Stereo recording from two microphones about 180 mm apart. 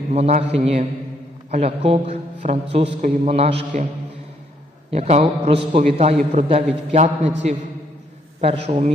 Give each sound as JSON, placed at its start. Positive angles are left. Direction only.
{"t": 0.1, "sound": "a man's voice", "side_deg": -35}
{"t": 4.9, "sound": "a man's voice", "side_deg": -35}
{"t": 8.4, "sound": "a man's voice", "side_deg": -35}